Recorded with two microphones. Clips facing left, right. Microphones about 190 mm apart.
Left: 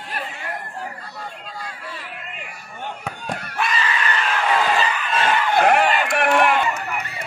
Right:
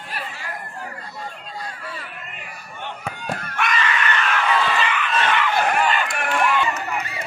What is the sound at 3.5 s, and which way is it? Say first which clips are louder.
Slam: even; 30° left (ahead or behind).